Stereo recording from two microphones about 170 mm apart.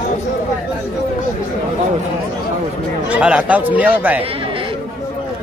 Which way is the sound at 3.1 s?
5° right (ahead or behind).